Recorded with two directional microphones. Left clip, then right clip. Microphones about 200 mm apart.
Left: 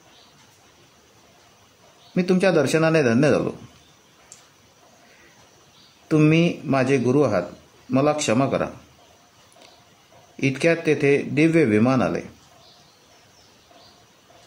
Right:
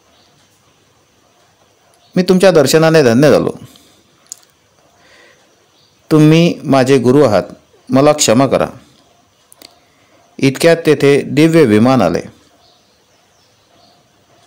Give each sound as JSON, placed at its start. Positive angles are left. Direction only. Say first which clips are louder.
{"t": 2.1, "sound": "a man's voice", "louder": "right 11 dB", "side_deg": -40}
{"t": 6.0, "sound": "a man's voice", "louder": "right 9 dB", "side_deg": -35}
{"t": 10.3, "sound": "a man's voice", "louder": "right 10 dB", "side_deg": -40}